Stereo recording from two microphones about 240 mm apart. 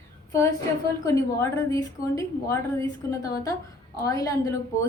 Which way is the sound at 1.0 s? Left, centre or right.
Centre.